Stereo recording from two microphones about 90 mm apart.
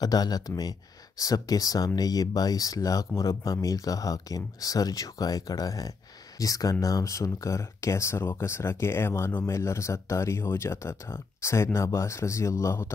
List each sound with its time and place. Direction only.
0.0 s speech: 45° left (ahead or behind); by 12.9 s 30° left (ahead or behind)